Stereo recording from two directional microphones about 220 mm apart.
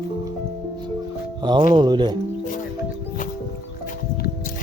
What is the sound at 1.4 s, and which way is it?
Speech, 20° right (ahead or behind).